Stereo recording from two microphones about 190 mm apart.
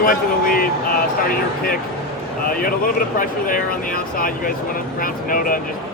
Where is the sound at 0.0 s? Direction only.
50° left (ahead or behind).